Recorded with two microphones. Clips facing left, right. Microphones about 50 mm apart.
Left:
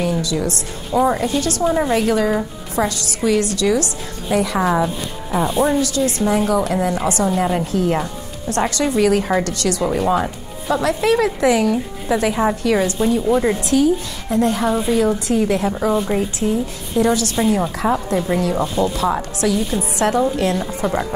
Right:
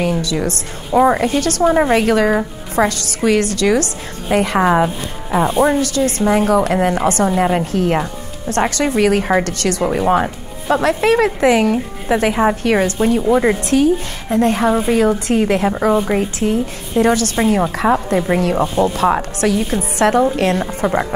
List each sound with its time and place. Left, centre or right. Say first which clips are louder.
0.0 s a woman's voice: right 2 dB; right
1.6 s a woman's voice: right 5 dB; right
1.9 s a woman's voice: right 3 dB; right
7.2 s speech: right 3 dB; right
7.5 s a woman's voice: right 2 dB; right
13.3 s a woman's voice: right 3 dB; right
13.7 s a woman's voice: right 2 dB; right
16.0 s a woman's voice: right 3 dB; right
16.3 s a woman's voice: right 2 dB; right
18.4 s a woman's voice: right 3 dB; right
20.8 s speech: right 4 dB; right